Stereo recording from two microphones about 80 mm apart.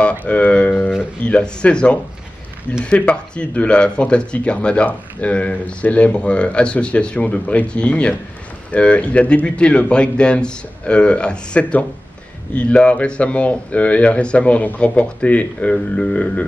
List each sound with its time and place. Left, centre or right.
0.0 s guitar: centre
1.2 s speech: centre